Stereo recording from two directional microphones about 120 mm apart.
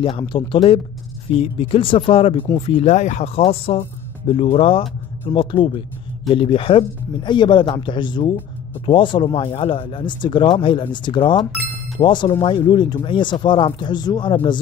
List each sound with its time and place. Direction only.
0.0 s speech: 45° left (ahead or behind)
2.6 s speech: 65° left (ahead or behind)
3.3 s speech: 55° left (ahead or behind); by 14.3 s 35° left (ahead or behind)
14.3 s speech: 50° left (ahead or behind)